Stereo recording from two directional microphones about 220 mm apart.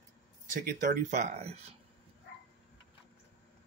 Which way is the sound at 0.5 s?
40° right (ahead or behind).